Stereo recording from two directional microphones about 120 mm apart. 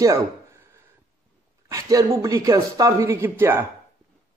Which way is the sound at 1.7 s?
30° right (ahead or behind).